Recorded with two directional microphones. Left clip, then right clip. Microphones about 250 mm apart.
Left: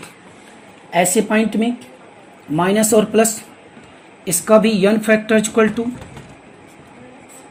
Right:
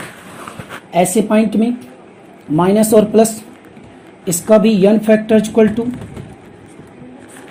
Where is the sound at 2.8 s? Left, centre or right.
Left.